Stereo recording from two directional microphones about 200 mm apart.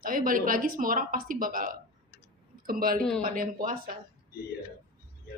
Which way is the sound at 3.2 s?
45° right (ahead or behind).